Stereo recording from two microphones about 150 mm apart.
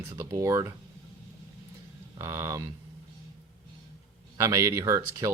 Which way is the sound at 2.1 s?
20° right (ahead or behind).